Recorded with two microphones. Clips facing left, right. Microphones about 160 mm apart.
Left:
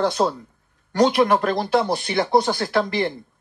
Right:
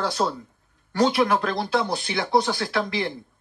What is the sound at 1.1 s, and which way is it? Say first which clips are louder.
Speech: left 4 dB; 55° left (ahead or behind).